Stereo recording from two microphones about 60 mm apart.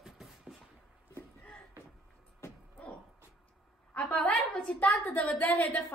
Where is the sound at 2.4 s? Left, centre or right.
Left.